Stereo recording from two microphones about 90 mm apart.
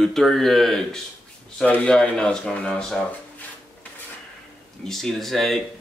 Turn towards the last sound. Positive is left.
turn(degrees=0)  # may be behind; listen again after turning